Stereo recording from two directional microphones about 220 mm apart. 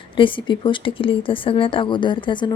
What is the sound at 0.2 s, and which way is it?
A woman's voice, 20° left (ahead or behind).